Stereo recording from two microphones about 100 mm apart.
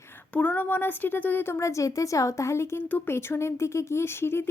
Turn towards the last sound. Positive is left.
turn(degrees=25)  # may be behind; listen again after turning